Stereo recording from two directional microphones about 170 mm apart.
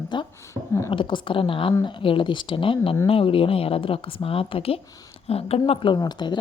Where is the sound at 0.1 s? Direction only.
25° left (ahead or behind).